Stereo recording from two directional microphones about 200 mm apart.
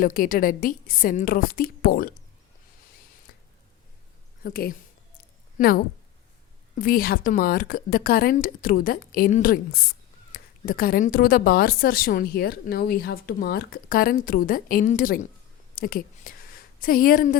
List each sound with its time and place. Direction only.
0.0 s a woman's voice: 45° left (ahead or behind)
3.3 s squish: 50° left (ahead or behind)
4.4 s a woman's voice: 45° left (ahead or behind)